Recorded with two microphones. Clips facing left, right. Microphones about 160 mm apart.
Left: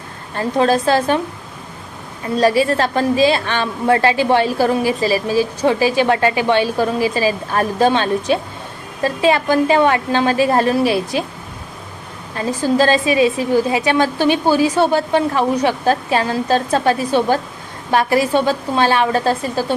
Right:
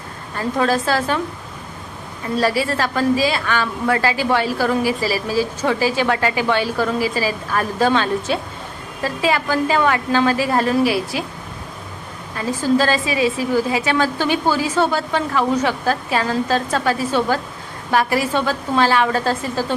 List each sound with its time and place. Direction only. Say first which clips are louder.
0.3 s a woman's voice: left 3 dB; 25° left (ahead or behind)
2.4 s a woman's voice: left 5 dB; 20° left (ahead or behind)
12.5 s a woman's voice: left 2 dB; 20° left (ahead or behind)